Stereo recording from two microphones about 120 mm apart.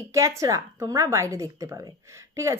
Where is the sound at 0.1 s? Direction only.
25° right (ahead or behind).